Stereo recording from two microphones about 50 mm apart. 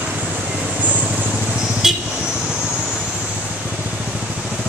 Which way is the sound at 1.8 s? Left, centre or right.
Centre.